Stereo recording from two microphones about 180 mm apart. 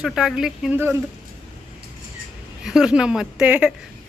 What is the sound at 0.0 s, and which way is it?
Speech, centre (ahead or behind).